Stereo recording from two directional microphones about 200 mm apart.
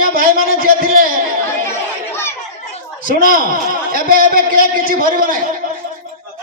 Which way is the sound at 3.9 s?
45° right (ahead or behind).